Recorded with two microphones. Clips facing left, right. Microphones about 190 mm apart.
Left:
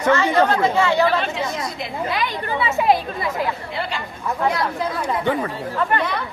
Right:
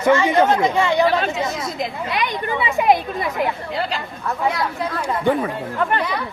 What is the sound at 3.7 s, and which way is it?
Speech, 40° right (ahead or behind).